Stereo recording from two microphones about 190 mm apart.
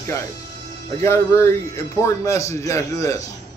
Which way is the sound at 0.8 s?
15° left (ahead or behind).